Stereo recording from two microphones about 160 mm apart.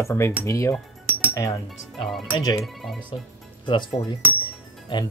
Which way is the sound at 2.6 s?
Centre (ahead or behind).